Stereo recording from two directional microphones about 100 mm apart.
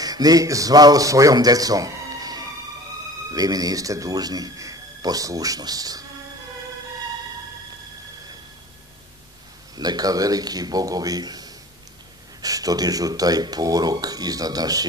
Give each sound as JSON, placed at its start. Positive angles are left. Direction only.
{"t": 0.0, "sound": "a man's voice", "side_deg": -40}
{"t": 9.8, "sound": "a man's voice", "side_deg": -40}